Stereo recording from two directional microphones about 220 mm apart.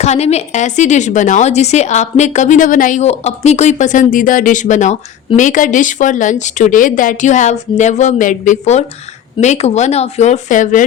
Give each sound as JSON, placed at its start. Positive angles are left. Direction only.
{"t": 0.0, "sound": "a woman's voice", "side_deg": 30}